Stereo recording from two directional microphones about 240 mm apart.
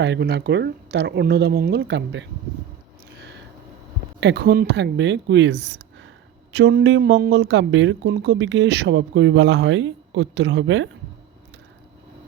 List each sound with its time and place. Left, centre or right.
0.0 s speech: right
4.2 s speech: right